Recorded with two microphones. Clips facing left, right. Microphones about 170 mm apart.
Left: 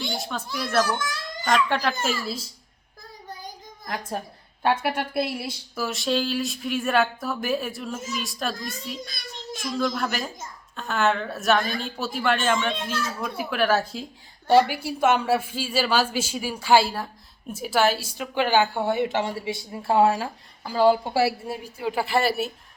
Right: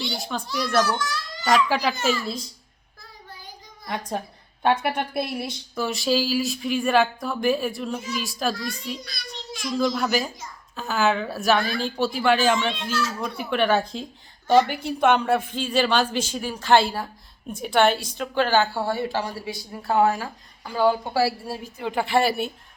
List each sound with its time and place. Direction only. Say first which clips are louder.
0.2 s speech: right 2 dB; centre (ahead or behind)
0.9 s babbling: right 2 dB; 50° left (ahead or behind)
1.5 s speech: right 2 dB; 5° right (ahead or behind)
3.8 s a woman's voice: right 2 dB; centre (ahead or behind); by 21.7 s 20° left (ahead or behind)
21.8 s speech: right 2 dB; 5° left (ahead or behind)